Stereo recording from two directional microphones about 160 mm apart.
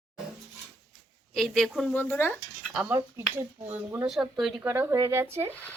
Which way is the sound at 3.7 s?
10° right (ahead or behind).